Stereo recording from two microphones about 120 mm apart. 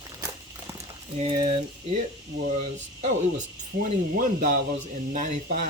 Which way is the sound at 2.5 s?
90° right.